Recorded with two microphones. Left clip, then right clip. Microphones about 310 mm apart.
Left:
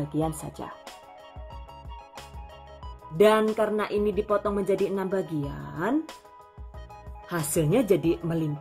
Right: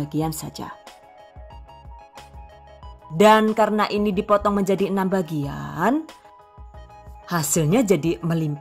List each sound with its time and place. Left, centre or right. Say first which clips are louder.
3.2 s speech: right 6 dB; right
7.2 s speech: right 4 dB; right